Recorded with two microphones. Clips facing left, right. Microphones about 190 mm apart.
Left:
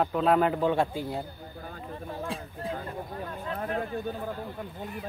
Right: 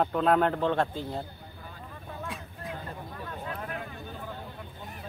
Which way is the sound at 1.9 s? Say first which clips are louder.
Left 5 dB; 30° left (ahead or behind).